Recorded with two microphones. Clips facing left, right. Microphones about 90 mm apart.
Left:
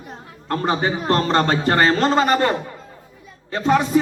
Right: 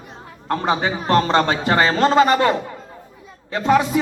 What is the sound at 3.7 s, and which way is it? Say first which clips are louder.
Speech: right 1 dB; 40° left (ahead or behind).